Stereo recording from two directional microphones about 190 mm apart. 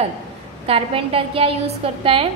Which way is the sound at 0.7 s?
30° right (ahead or behind).